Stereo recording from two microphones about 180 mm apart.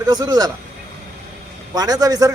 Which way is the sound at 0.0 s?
20° right (ahead or behind).